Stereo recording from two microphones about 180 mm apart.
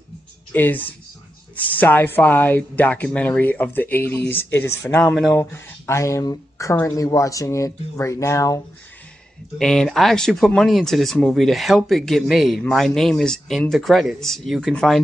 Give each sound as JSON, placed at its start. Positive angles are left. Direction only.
{"t": 0.5, "sound": "speech", "side_deg": 10}
{"t": 9.6, "sound": "speech", "side_deg": 5}